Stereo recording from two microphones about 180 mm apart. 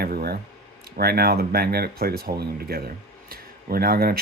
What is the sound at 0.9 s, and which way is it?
Speech, 60° right (ahead or behind).